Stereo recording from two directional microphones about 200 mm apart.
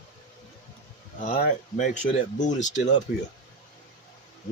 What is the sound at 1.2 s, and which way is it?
Speech, 40° left (ahead or behind).